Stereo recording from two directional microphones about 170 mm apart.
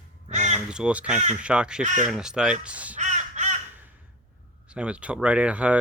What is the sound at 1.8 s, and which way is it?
Speech, 45° right (ahead or behind).